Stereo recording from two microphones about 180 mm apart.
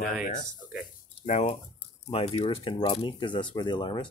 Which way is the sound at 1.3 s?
40° left (ahead or behind).